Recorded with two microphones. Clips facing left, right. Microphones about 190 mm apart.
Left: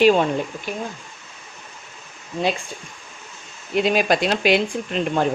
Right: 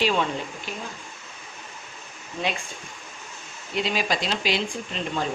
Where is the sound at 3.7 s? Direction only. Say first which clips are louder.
Left 7 dB; 55° left (ahead or behind).